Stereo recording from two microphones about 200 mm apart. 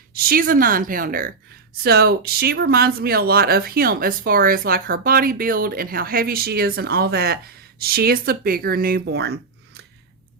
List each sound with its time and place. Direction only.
0.1 s speech: 45° right (ahead or behind)